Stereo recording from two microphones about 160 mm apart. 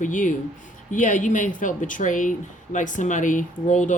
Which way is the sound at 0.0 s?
55° left (ahead or behind).